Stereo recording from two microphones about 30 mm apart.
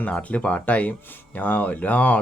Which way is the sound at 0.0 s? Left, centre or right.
Left.